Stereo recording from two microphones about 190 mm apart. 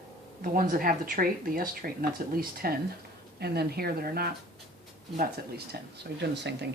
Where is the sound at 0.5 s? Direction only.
45° right (ahead or behind).